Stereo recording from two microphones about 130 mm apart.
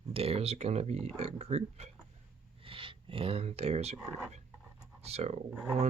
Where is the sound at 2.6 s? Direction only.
45° right (ahead or behind).